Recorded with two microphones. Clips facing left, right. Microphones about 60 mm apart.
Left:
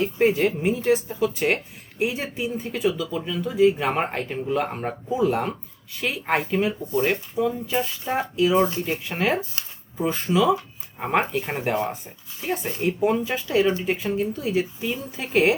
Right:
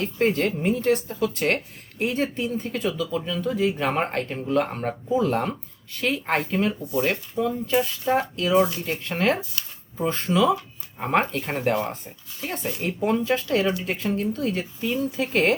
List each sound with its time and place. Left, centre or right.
0.0 s speech: centre
8.5 s speech: left
8.8 s speech: centre